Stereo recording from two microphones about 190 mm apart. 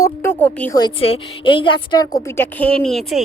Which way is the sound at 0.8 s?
30° left (ahead or behind).